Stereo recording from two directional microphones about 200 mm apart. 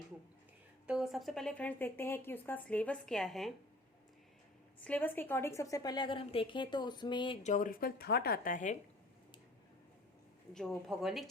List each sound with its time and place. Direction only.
0.9 s speech: centre (ahead or behind)
4.8 s a woman's voice: 10° left (ahead or behind); by 7.3 s 25° left (ahead or behind)
7.4 s a woman's voice: 40° left (ahead or behind)
10.5 s speech: centre (ahead or behind)